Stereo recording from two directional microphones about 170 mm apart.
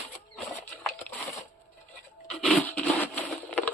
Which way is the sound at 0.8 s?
Centre (ahead or behind).